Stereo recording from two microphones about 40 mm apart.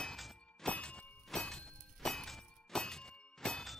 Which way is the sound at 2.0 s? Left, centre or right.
Centre.